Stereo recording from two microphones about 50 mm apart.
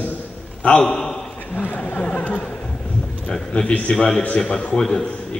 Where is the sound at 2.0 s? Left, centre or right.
Left.